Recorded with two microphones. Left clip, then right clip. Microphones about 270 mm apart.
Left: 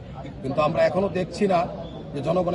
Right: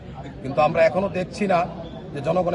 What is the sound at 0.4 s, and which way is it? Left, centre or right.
A man's voice, right.